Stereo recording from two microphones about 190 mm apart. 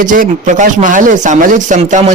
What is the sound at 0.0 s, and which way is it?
A man's voice, 45° right (ahead or behind).